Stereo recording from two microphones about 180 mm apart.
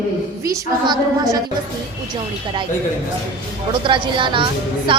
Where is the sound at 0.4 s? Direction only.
20° right (ahead or behind).